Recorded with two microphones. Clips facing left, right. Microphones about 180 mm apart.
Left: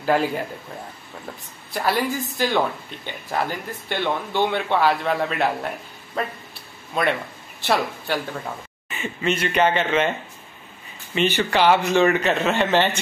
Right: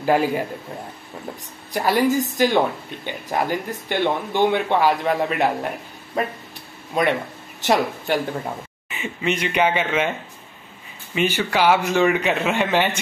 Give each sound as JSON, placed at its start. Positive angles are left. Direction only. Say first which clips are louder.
{"t": 0.0, "sound": "a man's voice", "louder": "right 2 dB", "side_deg": -10}
{"t": 1.7, "sound": "a man's voice", "louder": "right 4 dB", "side_deg": -15}
{"t": 11.1, "sound": "a man's voice", "louder": "even", "side_deg": -10}